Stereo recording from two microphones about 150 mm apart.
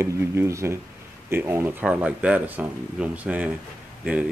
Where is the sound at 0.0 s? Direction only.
20° right (ahead or behind).